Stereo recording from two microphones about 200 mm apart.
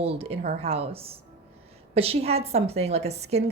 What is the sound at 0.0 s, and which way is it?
A woman's voice, 30° right (ahead or behind).